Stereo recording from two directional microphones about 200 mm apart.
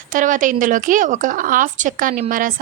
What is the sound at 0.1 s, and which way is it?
Speech, 40° right (ahead or behind).